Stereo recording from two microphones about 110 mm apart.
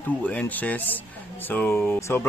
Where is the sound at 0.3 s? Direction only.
15° left (ahead or behind).